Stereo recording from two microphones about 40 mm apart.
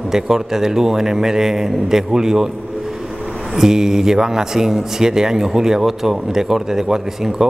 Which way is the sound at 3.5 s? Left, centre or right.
Centre.